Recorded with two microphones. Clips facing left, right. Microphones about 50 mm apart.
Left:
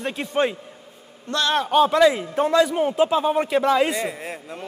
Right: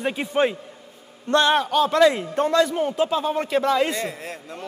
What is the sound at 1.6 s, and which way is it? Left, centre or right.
Speech, centre.